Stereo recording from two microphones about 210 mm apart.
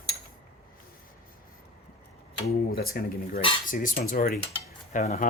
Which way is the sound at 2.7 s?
45° left (ahead or behind).